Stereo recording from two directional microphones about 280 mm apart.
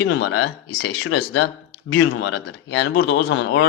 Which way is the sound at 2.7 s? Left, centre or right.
Left.